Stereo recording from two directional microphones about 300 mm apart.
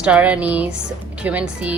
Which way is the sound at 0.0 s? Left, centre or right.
Centre.